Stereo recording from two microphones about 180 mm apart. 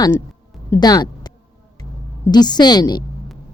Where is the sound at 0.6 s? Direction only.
20° left (ahead or behind).